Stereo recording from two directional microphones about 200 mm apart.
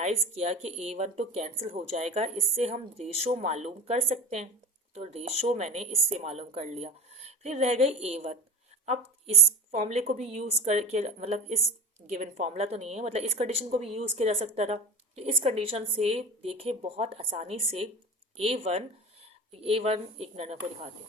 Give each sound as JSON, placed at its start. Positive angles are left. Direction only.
{"t": 0.0, "sound": "speech", "side_deg": -35}
{"t": 9.7, "sound": "speech", "side_deg": -35}